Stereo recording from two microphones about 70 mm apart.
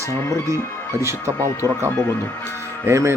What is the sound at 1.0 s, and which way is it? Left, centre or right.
Speech, right.